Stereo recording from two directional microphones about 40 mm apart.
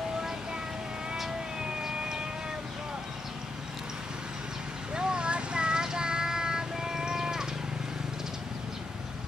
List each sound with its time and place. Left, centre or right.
1.6 s emergency vehicle: centre
4.9 s child singing: right